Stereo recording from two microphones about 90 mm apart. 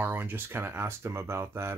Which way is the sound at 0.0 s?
20° right (ahead or behind).